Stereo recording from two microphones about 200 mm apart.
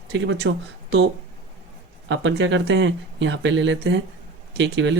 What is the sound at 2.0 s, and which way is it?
Speech, 60° right (ahead or behind).